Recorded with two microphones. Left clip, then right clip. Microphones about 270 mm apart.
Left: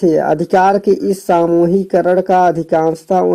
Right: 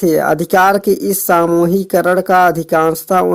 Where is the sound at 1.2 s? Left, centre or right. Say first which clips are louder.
Right 1 dB; right.